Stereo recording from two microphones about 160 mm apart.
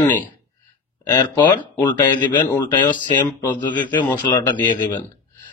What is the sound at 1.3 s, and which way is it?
Speech, 30° left (ahead or behind).